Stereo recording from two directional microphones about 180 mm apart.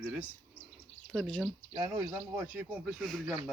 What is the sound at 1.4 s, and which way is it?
Speech, 15° right (ahead or behind).